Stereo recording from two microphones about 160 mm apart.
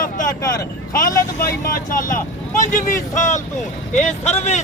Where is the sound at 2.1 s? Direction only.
55° left (ahead or behind).